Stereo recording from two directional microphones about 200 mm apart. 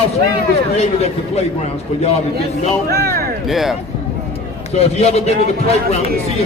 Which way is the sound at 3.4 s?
Centre (ahead or behind).